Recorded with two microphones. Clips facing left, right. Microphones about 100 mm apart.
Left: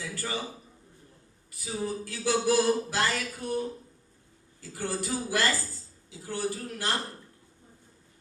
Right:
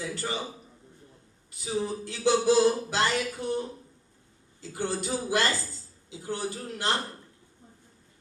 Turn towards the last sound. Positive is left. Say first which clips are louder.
# right 2 dB
turn(degrees=-20)  # may be behind; listen again after turning